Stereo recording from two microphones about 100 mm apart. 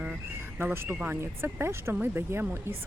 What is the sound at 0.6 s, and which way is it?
Speech, 20° right (ahead or behind).